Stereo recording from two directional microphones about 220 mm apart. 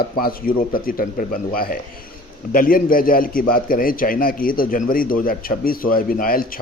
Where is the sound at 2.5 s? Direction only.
40° left (ahead or behind).